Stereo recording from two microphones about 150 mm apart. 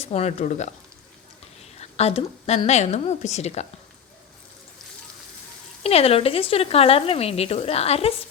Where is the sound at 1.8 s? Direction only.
45° left (ahead or behind).